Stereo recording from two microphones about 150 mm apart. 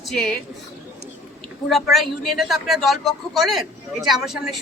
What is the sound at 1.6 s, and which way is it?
A man's voice, centre (ahead or behind).